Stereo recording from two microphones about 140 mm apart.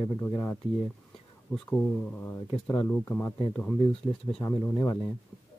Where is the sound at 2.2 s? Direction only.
20° left (ahead or behind).